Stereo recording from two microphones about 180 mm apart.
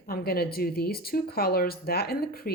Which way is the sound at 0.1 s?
55° left (ahead or behind).